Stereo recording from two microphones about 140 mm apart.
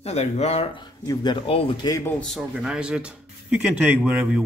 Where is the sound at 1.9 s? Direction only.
25° left (ahead or behind).